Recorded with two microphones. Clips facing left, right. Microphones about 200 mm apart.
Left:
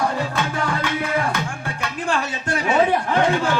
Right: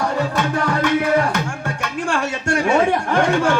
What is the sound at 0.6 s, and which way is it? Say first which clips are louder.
Music: right 6 dB; 40° right (ahead or behind).